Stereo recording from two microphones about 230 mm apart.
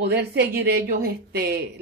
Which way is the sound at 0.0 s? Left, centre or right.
Right.